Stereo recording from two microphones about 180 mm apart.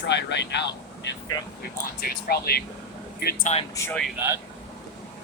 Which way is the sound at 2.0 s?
60° left (ahead or behind).